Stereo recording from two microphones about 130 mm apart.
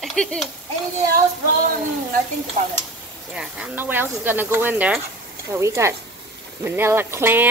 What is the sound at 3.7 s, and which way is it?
Speech, 15° right (ahead or behind).